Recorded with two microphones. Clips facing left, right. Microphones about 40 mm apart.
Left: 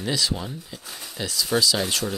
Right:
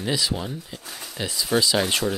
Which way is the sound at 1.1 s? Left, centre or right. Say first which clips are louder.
Right 1 dB; centre.